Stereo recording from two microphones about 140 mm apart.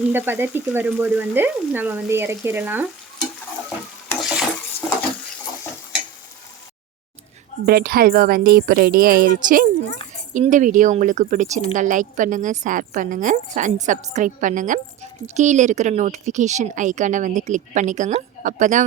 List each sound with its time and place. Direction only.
0.1 s speech: 15° right (ahead or behind)
4.2 s stir: 5° right (ahead or behind)
7.7 s speech: 90° right
10.5 s a woman's voice: 65° right (ahead or behind)